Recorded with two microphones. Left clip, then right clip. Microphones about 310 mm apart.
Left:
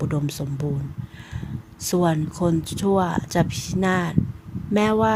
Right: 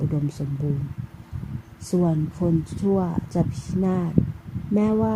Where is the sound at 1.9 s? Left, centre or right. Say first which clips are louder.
Left 3 dB; left.